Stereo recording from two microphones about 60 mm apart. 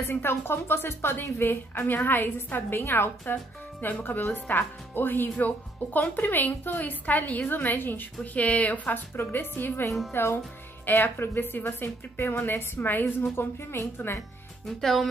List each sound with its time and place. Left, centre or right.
0.1 s a woman's voice: left
14.8 s speech: centre